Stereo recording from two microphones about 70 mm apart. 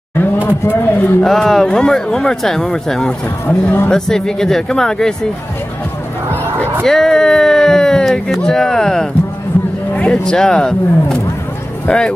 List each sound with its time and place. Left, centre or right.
0.5 s speech: left
1.2 s speech: centre
3.4 s speech: left
3.9 s speech: centre
6.8 s speech: centre
11.9 s speech: left